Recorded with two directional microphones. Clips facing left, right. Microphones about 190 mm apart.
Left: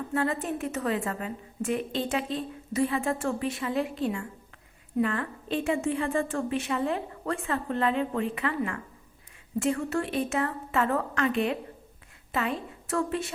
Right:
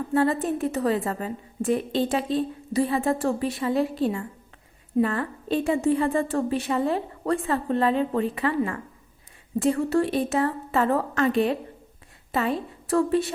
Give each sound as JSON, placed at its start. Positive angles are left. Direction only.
{"t": 0.1, "sound": "a woman's voice", "side_deg": -35}